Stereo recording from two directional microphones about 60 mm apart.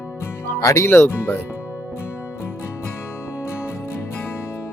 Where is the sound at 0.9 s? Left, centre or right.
Left.